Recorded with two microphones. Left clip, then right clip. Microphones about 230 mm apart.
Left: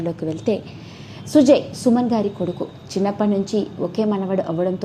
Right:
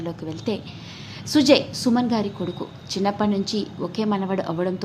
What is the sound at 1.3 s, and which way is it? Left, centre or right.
A woman's voice, centre.